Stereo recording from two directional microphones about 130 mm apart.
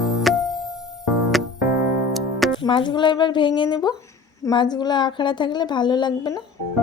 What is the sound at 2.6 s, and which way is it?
A woman's voice, 40° left (ahead or behind).